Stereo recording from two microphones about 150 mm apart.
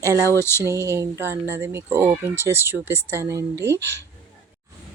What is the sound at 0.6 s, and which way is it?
Speech, 20° right (ahead or behind).